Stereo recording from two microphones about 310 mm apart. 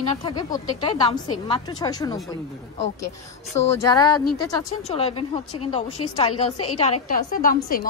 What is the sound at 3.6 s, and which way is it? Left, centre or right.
Speech, left.